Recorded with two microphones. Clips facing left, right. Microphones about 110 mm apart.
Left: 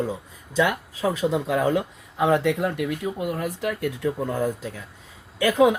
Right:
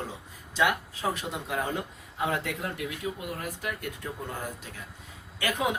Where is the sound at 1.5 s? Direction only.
90° left.